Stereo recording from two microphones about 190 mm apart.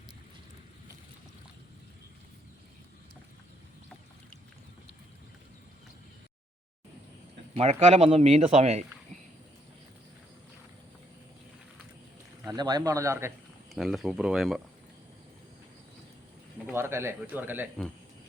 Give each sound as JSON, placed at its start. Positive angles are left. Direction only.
{"t": 7.5, "sound": "speech", "side_deg": -35}
{"t": 12.5, "sound": "speech", "side_deg": -20}
{"t": 13.7, "sound": "speech", "side_deg": 0}
{"t": 16.6, "sound": "speech", "side_deg": -10}